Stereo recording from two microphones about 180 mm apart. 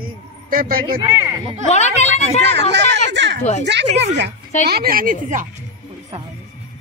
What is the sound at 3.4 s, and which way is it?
Speech, 40° left (ahead or behind).